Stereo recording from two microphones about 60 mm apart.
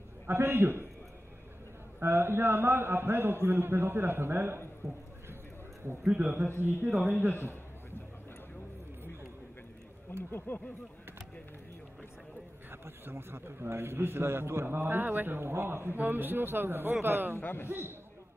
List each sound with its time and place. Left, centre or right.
0.3 s a man's voice: right
2.0 s a man's voice: right
6.2 s a man's voice: right
10.3 s speech: left
12.8 s a man's voice: right
17.4 s speech: left
17.6 s a man's voice: right